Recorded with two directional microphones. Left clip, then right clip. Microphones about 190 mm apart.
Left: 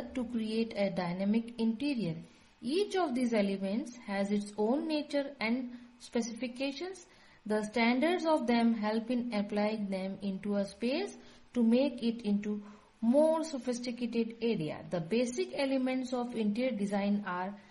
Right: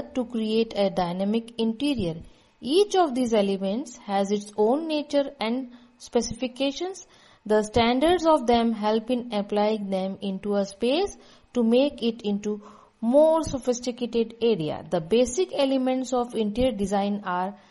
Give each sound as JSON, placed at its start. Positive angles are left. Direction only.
{"t": 0.1, "sound": "a woman's voice", "side_deg": -35}
{"t": 13.0, "sound": "speech", "side_deg": -15}
{"t": 13.3, "sound": "a woman's voice", "side_deg": -30}